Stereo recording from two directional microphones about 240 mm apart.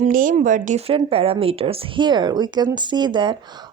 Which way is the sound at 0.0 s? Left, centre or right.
Right.